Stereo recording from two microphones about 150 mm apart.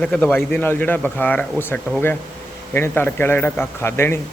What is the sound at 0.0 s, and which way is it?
Speech, 5° left (ahead or behind).